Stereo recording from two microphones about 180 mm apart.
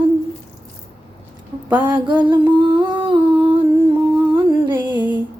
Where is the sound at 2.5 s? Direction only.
25° right (ahead or behind).